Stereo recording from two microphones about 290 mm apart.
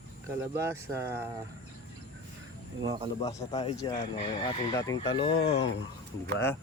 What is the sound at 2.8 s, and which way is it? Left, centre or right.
Speech, centre.